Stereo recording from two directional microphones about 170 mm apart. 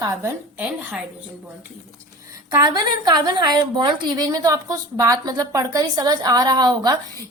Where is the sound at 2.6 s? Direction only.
25° right (ahead or behind).